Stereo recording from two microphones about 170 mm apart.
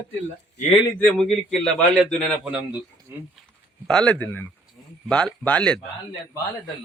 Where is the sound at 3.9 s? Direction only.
5° left (ahead or behind).